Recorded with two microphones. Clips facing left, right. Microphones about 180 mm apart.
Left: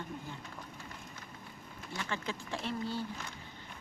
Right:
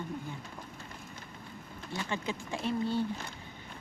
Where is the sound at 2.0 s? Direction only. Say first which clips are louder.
Right 3 dB; 15° right (ahead or behind).